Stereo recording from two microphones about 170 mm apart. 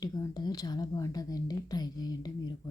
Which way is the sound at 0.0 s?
25° left (ahead or behind).